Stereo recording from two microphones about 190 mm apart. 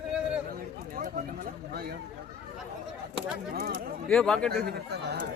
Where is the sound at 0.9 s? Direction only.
50° right (ahead or behind).